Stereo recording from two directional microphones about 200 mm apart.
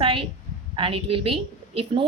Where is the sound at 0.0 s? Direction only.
25° right (ahead or behind).